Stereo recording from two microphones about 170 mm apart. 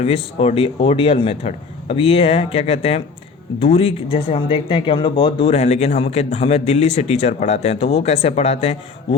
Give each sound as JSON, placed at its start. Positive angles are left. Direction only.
{"t": 0.0, "sound": "speech", "side_deg": 35}